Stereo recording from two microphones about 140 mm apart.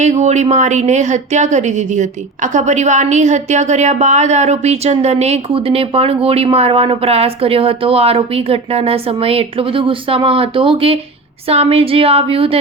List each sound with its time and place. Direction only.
0.0 s a woman's voice: 55° right (ahead or behind)